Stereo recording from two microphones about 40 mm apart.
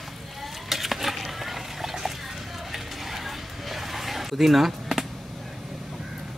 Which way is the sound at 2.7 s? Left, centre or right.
Centre.